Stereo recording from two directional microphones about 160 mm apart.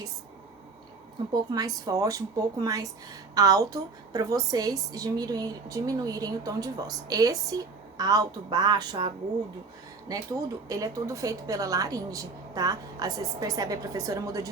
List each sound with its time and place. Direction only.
1.3 s a woman's voice: 25° right (ahead or behind)
10.7 s a woman's voice: 20° right (ahead or behind)